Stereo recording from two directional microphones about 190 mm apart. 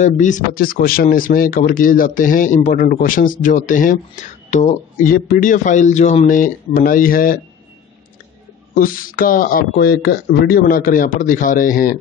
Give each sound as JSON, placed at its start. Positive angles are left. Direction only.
{"t": 0.0, "sound": "speech", "side_deg": 40}
{"t": 8.7, "sound": "speech", "side_deg": 50}